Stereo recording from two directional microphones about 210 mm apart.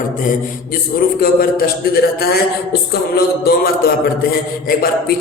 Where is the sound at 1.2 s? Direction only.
45° left (ahead or behind).